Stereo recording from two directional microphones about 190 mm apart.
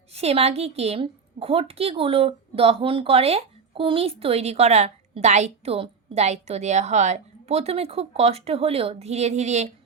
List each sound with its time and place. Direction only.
0.1 s a woman's voice: 35° right (ahead or behind)